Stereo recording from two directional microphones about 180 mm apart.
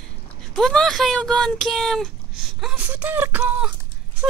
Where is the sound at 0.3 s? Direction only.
5° left (ahead or behind).